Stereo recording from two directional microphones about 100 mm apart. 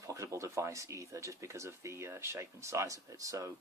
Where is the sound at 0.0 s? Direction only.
30° right (ahead or behind).